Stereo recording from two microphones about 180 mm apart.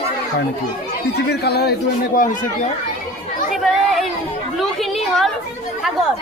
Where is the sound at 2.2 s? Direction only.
45° left (ahead or behind).